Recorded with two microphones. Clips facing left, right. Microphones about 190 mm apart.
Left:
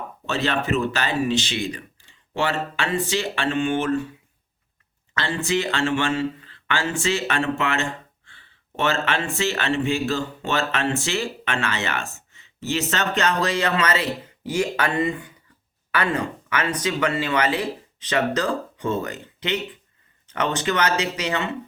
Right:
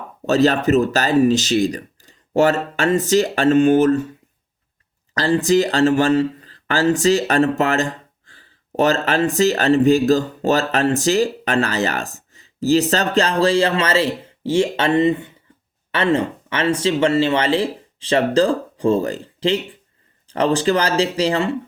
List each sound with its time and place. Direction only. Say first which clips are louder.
0.3 s speech: right 9 dB; 40° right (ahead or behind)
5.1 s speech: right 8 dB; 35° right (ahead or behind)